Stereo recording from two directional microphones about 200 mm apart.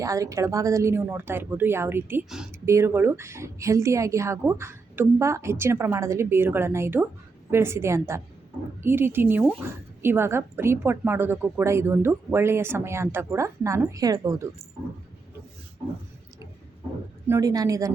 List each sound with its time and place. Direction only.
0.0 s speech: 15° right (ahead or behind)
17.2 s speech: 15° right (ahead or behind)